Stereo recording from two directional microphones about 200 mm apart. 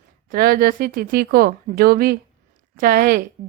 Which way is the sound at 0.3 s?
50° right (ahead or behind).